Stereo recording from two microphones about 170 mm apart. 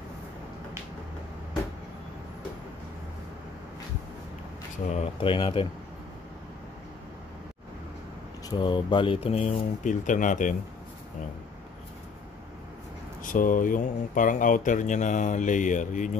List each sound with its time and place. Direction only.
4.9 s speech: 35° left (ahead or behind)
8.5 s speech: 30° left (ahead or behind)
9.8 s speech: 50° left (ahead or behind)
13.2 s speech: 50° left (ahead or behind)